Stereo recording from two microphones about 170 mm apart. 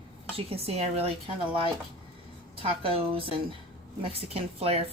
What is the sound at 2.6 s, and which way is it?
A woman's voice, 30° right (ahead or behind).